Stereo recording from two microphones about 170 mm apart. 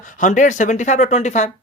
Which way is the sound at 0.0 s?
50° left (ahead or behind).